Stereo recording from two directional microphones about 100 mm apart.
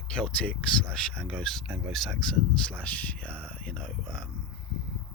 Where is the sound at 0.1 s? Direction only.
10° left (ahead or behind).